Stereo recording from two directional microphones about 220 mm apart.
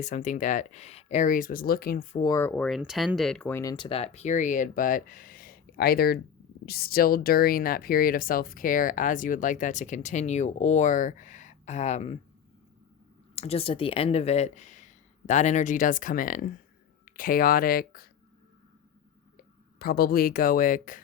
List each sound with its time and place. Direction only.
0.0 s speech: 35° left (ahead or behind)
2.1 s speech: 15° left (ahead or behind)
13.3 s speech: 30° left (ahead or behind)
19.4 s speech: 45° left (ahead or behind)